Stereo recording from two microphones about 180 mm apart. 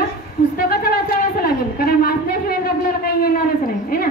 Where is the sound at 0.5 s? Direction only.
55° left (ahead or behind).